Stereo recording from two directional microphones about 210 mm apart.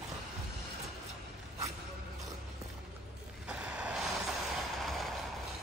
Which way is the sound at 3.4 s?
5° right (ahead or behind).